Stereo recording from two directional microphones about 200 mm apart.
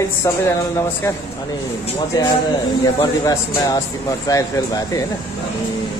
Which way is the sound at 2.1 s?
20° left (ahead or behind).